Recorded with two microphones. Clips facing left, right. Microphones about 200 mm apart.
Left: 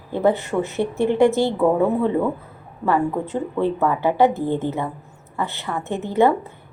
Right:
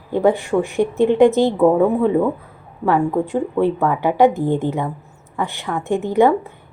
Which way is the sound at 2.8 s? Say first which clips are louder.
Right 3 dB; 15° right (ahead or behind).